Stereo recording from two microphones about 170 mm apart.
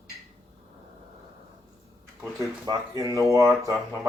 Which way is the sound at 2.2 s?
20° right (ahead or behind).